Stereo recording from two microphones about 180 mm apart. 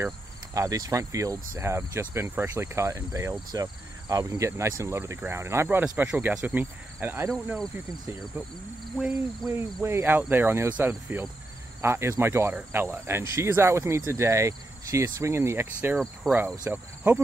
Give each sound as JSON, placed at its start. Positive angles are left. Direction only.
{"t": 0.6, "sound": "speech", "side_deg": -20}
{"t": 8.9, "sound": "speech", "side_deg": -5}